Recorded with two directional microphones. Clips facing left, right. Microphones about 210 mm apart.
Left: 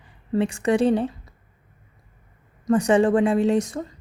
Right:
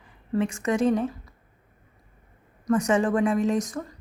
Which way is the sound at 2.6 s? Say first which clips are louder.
Left 4 dB; 30° left (ahead or behind).